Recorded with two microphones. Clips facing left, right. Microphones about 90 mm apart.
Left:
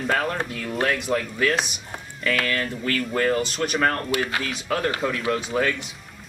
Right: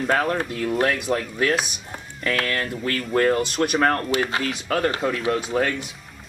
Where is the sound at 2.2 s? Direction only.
35° right (ahead or behind).